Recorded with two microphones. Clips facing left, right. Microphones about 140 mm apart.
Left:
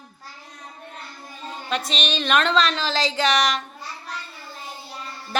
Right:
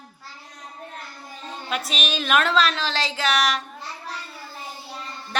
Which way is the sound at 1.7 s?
5° right (ahead or behind).